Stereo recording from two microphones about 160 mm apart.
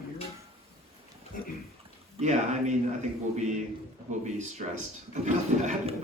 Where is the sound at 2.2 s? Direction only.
45° right (ahead or behind).